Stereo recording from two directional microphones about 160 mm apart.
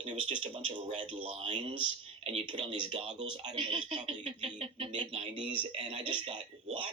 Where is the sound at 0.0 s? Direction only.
35° right (ahead or behind).